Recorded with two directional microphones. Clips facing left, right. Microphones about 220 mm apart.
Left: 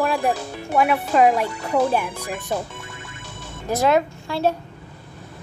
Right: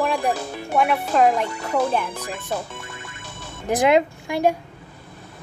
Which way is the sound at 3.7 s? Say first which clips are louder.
Right 1 dB; 15° right (ahead or behind).